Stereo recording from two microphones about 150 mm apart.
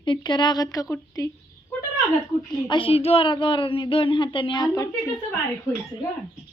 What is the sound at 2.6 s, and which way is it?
Speech, 35° left (ahead or behind).